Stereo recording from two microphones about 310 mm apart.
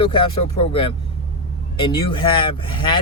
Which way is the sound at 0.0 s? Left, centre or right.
Centre.